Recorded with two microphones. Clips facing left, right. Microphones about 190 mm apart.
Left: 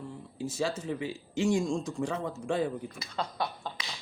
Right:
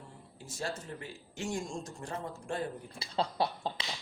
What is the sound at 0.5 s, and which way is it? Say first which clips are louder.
Speech: left 6 dB; 90° left.